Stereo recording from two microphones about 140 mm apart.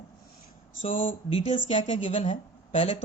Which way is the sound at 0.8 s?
40° left (ahead or behind).